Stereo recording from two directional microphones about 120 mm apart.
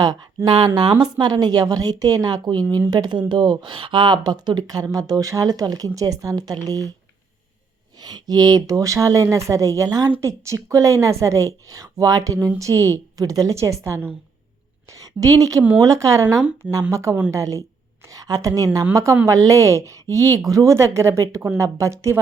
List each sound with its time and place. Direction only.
0.4 s speech: 40° right (ahead or behind)
7.9 s a woman's voice: 35° right (ahead or behind)
16.4 s speech: 10° right (ahead or behind)
16.9 s a woman's voice: 25° right (ahead or behind)
18.0 s a sound: 30° right (ahead or behind)
18.4 s a woman's voice: 30° right (ahead or behind)